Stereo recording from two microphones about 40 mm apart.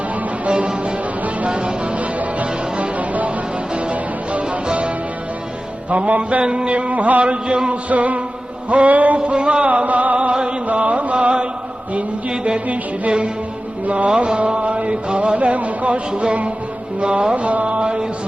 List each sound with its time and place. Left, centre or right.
0.4 s music: right
6.1 s music: right
6.4 s music: right
9.1 s chant: right
9.6 s music: right
12.6 s chant: right
13.8 s music: right
14.3 s chant: right
15.4 s music: right
17.0 s chant: right